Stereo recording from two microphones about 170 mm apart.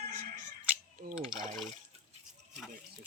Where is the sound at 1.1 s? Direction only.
5° right (ahead or behind).